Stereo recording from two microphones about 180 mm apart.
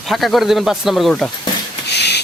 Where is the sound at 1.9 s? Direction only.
70° left (ahead or behind).